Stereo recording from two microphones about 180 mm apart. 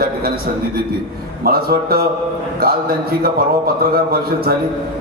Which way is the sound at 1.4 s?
60° right (ahead or behind).